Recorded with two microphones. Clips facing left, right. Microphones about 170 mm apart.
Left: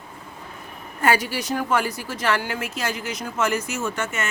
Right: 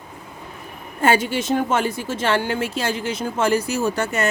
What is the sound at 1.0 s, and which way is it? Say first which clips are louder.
A woman's voice: right 3 dB; 25° right (ahead or behind).